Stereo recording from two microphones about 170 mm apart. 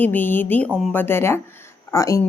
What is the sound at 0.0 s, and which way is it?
A woman's voice, 10° left (ahead or behind).